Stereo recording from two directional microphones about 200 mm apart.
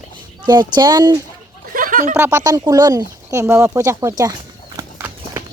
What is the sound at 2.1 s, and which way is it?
Speech, 10° right (ahead or behind).